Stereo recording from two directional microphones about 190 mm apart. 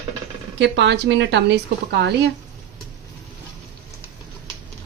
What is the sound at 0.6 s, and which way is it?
Speech, 70° right (ahead or behind).